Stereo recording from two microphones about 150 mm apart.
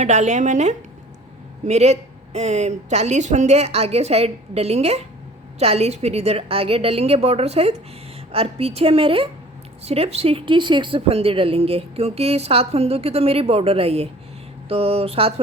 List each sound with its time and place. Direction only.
0.0 s a woman's voice: 50° right (ahead or behind)